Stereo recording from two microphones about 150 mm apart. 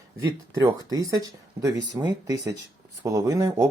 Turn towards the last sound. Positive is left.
turn(degrees=-20)  # may be behind; listen again after turning